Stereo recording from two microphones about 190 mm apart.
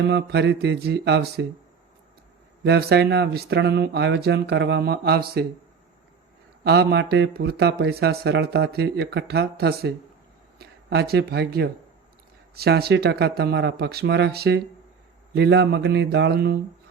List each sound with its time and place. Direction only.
0.1 s speech: 65° right (ahead or behind)
2.6 s speech: 60° right (ahead or behind)
6.7 s speech: 65° right (ahead or behind)